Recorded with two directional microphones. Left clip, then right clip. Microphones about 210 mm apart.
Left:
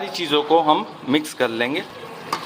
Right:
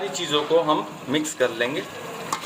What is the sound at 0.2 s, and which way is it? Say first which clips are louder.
Speech: left 4 dB; 50° left (ahead or behind).